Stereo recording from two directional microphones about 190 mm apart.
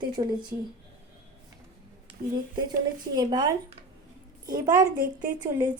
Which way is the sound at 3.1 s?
20° right (ahead or behind).